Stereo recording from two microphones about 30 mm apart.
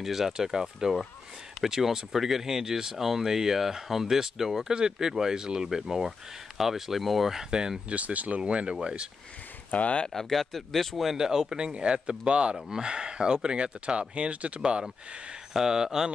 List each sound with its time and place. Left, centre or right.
0.0 s speech: centre
4.6 s speech: right
4.9 s speech: centre
7.5 s speech: right
7.9 s speech: right
8.4 s speech: right
9.7 s speech: left
10.1 s speech: centre
11.1 s speech: centre; by 12.5 s right
12.5 s speech: right
14.6 s speech: right
15.5 s speech: centre